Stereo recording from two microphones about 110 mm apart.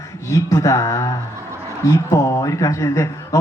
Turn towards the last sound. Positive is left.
turn(degrees=25)  # may be behind; listen again after turning